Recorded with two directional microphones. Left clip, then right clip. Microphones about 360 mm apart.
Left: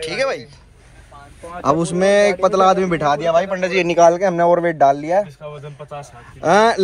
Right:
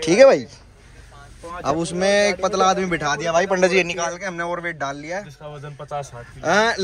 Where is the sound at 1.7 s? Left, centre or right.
Centre.